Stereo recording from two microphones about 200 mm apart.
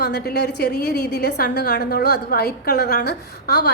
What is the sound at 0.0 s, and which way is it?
A woman's voice, 50° left (ahead or behind).